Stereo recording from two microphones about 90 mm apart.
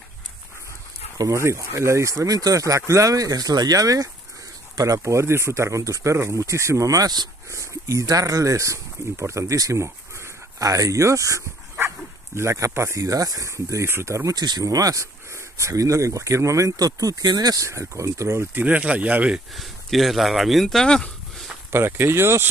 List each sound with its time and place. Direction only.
1.1 s speech: 35° right (ahead or behind)
7.5 s speech: 35° right (ahead or behind)
14.3 s speech: 50° right (ahead or behind); by 19.4 s 15° right (ahead or behind)
19.5 s speech: centre (ahead or behind)
21.7 s speech: 25° right (ahead or behind)